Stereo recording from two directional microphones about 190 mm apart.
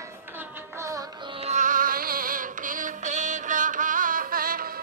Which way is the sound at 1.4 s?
40° right (ahead or behind).